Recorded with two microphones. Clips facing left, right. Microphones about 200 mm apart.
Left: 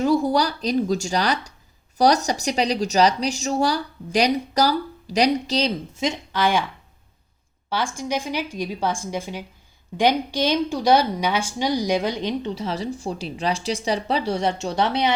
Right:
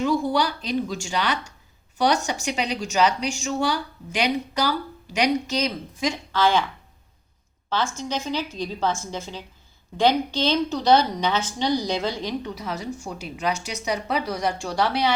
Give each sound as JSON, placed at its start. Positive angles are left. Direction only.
{"t": 0.0, "sound": "a woman's voice", "side_deg": 40}
{"t": 7.7, "sound": "a woman's voice", "side_deg": 10}